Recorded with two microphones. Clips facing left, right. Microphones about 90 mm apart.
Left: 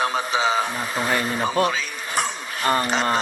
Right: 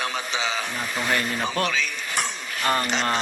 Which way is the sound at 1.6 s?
35° left (ahead or behind).